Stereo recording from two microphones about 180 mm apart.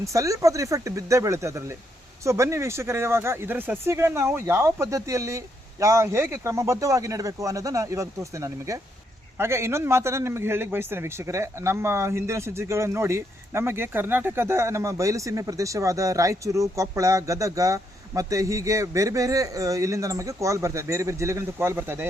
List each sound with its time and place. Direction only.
0.0 s a man's voice: 15° right (ahead or behind)